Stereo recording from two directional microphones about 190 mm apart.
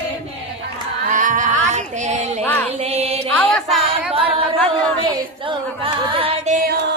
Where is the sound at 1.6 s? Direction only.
40° right (ahead or behind).